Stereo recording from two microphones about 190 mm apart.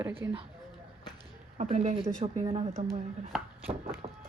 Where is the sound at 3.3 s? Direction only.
Centre (ahead or behind).